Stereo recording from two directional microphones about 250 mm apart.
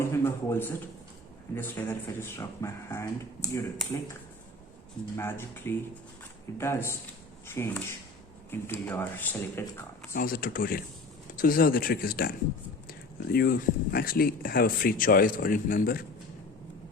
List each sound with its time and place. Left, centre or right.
0.0 s a sound: centre
1.5 s speech: centre
5.1 s speech: centre
10.1 s speech: left